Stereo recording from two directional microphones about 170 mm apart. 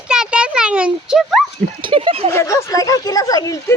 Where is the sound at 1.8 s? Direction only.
30° right (ahead or behind).